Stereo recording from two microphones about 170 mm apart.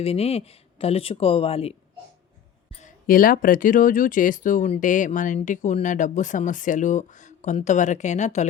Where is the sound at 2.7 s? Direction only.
45° left (ahead or behind).